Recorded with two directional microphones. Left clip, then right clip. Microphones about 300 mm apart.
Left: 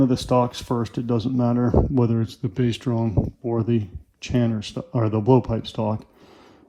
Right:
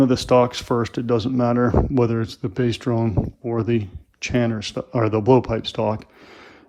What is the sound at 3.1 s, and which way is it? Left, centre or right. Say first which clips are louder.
Speech: even; left.